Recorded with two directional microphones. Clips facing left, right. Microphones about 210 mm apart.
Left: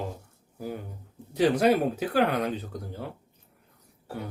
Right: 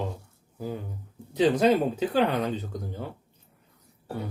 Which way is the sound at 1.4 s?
10° left (ahead or behind).